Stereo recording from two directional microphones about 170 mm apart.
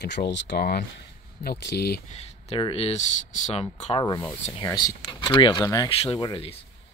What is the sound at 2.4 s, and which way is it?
Speech, 35° left (ahead or behind).